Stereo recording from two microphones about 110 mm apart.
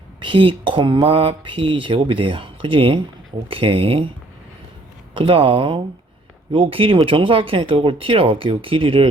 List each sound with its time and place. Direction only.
0.2 s speech: 50° right (ahead or behind)
1.0 s speech: 60° right (ahead or behind)
5.1 s speech: 50° right (ahead or behind)